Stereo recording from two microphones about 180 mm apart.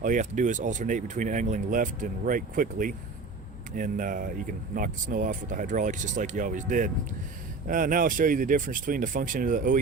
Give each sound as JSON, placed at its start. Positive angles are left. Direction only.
{"t": 0.0, "sound": "speech", "side_deg": -45}